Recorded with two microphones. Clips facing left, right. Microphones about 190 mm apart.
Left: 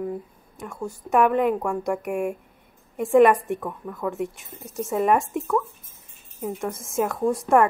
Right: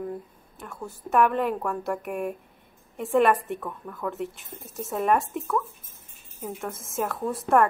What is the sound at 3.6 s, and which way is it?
Speech, 15° left (ahead or behind).